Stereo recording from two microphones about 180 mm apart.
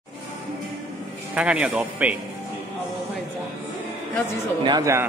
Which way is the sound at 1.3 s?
5° right (ahead or behind).